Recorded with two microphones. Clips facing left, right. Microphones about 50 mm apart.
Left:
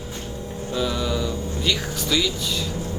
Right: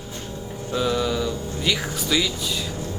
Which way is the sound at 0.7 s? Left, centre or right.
Centre.